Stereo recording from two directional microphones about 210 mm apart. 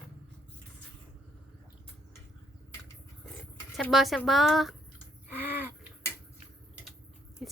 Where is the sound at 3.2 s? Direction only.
Centre (ahead or behind).